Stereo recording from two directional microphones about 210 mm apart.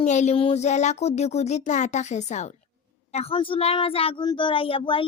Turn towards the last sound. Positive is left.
turn(degrees=25)  # may be behind; listen again after turning